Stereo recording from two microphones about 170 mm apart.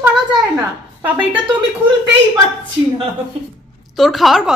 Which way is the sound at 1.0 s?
10° right (ahead or behind).